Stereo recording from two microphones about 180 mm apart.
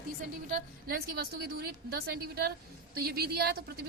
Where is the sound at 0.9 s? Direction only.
60° right (ahead or behind).